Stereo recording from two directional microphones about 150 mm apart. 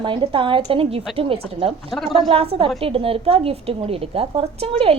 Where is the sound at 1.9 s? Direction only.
Centre (ahead or behind).